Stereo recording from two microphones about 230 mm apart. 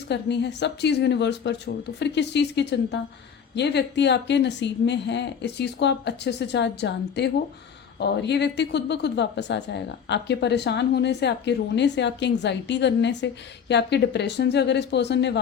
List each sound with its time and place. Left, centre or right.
0.1 s speech: left